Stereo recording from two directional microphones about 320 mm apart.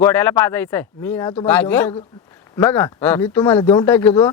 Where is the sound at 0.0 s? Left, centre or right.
Centre.